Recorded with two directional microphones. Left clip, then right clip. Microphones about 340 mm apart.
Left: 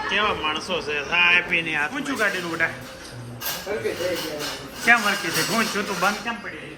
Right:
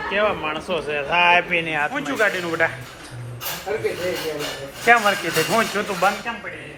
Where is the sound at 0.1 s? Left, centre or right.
Centre.